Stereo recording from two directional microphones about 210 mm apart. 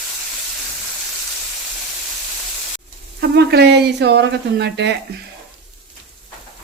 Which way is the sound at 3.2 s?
50° right (ahead or behind).